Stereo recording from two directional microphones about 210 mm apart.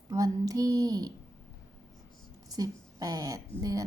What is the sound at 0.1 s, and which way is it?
Mantra, 15° right (ahead or behind).